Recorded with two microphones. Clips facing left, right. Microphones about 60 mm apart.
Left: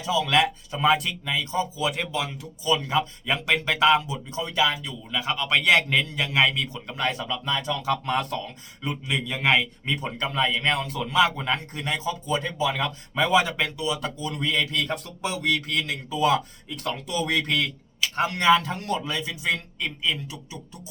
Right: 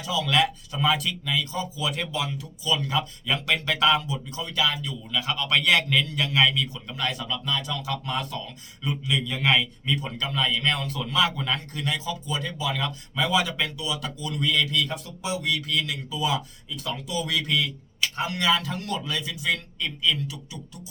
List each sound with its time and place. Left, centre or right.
0.0 s a man's voice: left